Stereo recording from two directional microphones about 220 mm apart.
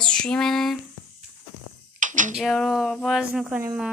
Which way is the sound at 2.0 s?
35° right (ahead or behind).